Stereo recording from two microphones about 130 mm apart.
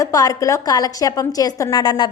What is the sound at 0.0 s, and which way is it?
A woman's voice, 25° left (ahead or behind).